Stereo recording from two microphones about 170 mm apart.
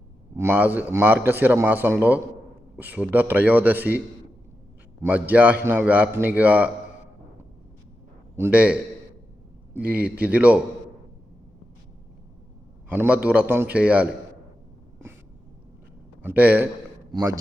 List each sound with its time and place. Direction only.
0.3 s a man's voice: 15° right (ahead or behind)
5.0 s a man's voice: 10° right (ahead or behind)
8.4 s a man's voice: 10° right (ahead or behind)
12.9 s a man's voice: 10° right (ahead or behind)
16.2 s a man's voice: 10° right (ahead or behind)
17.1 s a man's voice: 20° right (ahead or behind)